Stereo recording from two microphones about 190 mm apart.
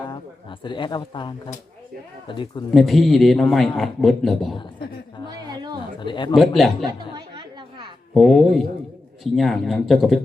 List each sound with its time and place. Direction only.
0.6 s speech: 25° left (ahead or behind)
2.7 s speech: centre (ahead or behind)
6.0 s speech: 25° left (ahead or behind)
6.3 s speech: centre (ahead or behind)
7.1 s chatter: 25° right (ahead or behind)
8.1 s speech: centre (ahead or behind)